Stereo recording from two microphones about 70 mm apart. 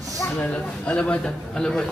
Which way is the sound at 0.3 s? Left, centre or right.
Left.